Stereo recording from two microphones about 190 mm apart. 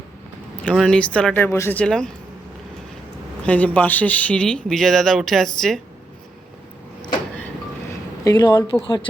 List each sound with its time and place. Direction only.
0.6 s speech: 5° left (ahead or behind)
3.4 s speech: 5° left (ahead or behind)
8.2 s a woman's voice: 20° left (ahead or behind)